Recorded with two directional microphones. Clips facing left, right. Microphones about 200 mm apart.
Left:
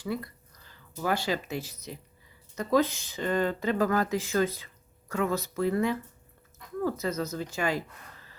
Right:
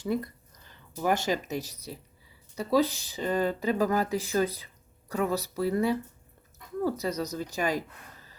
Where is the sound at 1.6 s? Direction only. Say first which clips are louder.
Even; 35° right (ahead or behind).